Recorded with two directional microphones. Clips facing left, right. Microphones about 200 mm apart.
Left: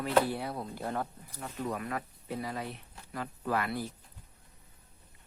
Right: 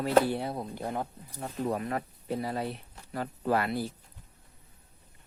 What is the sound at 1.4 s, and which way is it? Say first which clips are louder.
Speech: right 4 dB; 30° right (ahead or behind).